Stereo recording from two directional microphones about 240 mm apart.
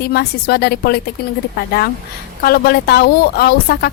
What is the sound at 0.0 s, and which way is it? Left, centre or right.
Speech, left.